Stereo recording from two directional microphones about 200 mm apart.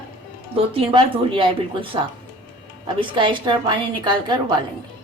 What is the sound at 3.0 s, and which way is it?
A woman's voice, 25° right (ahead or behind).